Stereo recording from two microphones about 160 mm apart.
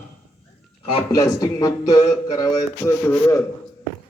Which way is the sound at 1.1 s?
20° left (ahead or behind).